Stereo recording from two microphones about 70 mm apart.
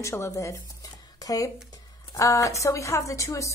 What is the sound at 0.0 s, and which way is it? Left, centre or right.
A woman's voice, left.